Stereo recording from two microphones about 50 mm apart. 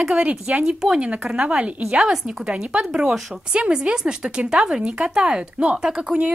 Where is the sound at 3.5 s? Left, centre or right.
Right.